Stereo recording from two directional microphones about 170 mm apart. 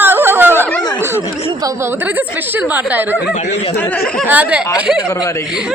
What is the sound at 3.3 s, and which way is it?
Speech, 40° left (ahead or behind).